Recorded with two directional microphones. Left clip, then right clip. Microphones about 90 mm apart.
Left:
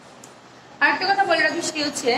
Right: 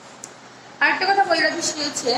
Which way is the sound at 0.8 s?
35° right (ahead or behind).